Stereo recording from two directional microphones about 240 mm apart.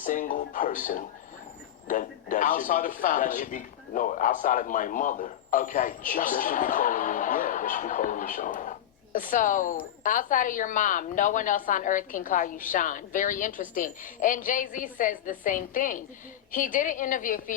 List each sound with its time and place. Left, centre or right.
0.0 s a woman's voice: left